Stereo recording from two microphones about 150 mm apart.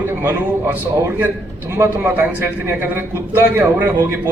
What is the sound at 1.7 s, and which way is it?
A man's voice, 15° right (ahead or behind).